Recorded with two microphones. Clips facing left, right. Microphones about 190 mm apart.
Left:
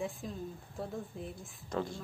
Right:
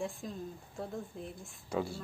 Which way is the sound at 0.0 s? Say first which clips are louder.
Even; centre (ahead or behind).